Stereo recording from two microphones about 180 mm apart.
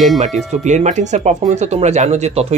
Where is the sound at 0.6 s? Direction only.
40° right (ahead or behind).